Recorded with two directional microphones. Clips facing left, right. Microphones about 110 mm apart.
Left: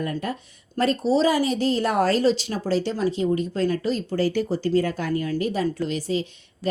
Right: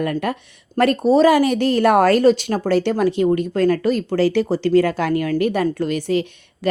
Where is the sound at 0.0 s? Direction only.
70° right (ahead or behind).